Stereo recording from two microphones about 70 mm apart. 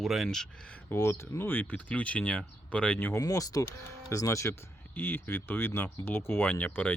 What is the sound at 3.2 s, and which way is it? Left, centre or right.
Speech, left.